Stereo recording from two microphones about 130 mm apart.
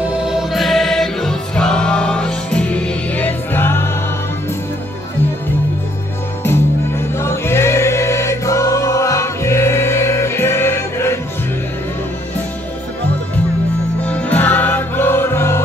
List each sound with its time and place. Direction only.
0.0 s music: 5° right (ahead or behind); by 3.9 s 15° left (ahead or behind)
6.4 s music: 20° left (ahead or behind)
14.0 s music: 10° left (ahead or behind)